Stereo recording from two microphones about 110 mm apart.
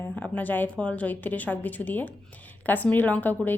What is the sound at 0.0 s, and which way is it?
A woman's voice, 15° left (ahead or behind).